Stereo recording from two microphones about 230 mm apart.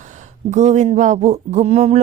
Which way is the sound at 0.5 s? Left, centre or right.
Right.